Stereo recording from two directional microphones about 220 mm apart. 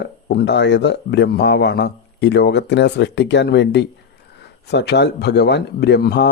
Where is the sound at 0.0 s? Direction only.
50° left (ahead or behind).